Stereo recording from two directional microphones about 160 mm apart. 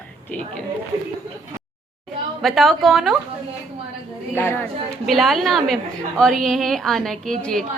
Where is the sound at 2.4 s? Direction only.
Centre (ahead or behind).